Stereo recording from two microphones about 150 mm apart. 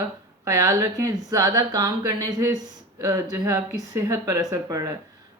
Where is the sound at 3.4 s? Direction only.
20° right (ahead or behind).